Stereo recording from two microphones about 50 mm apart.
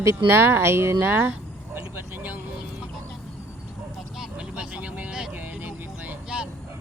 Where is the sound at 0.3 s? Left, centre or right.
Right.